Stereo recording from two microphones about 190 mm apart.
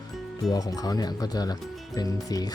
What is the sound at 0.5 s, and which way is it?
Speech, 20° left (ahead or behind).